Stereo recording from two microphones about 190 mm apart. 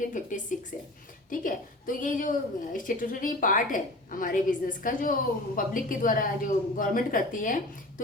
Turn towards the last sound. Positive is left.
turn(degrees=45)  # may be behind; listen again after turning